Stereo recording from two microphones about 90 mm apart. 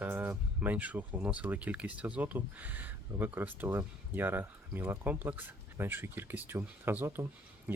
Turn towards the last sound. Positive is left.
turn(degrees=-25)  # may be behind; listen again after turning